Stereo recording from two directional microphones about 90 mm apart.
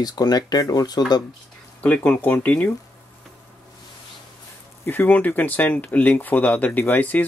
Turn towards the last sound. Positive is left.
turn(degrees=20)  # may be behind; listen again after turning